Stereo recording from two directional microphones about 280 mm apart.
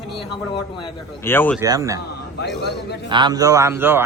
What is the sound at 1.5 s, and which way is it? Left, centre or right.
Speech, centre.